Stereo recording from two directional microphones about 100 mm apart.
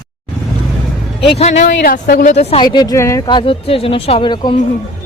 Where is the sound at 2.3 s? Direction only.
80° left.